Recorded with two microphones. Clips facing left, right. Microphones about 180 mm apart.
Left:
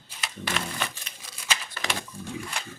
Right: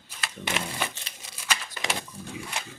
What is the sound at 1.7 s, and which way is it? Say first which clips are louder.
Pig: right 1 dB; 20° right (ahead or behind).